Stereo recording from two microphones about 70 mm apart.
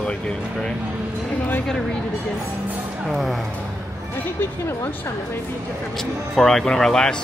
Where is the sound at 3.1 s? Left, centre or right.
Centre.